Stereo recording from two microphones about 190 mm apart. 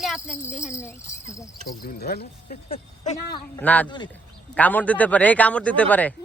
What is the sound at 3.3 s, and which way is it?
Speech, 20° left (ahead or behind).